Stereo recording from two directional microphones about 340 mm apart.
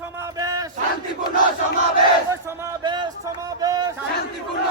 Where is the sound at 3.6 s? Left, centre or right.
Centre.